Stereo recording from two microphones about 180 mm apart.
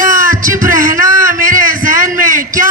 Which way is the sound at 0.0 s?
50° right (ahead or behind).